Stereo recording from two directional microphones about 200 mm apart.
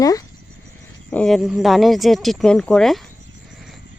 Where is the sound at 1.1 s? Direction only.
5° left (ahead or behind).